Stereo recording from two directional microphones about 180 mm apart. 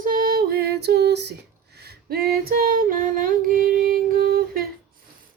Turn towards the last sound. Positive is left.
turn(degrees=-55)  # may be behind; listen again after turning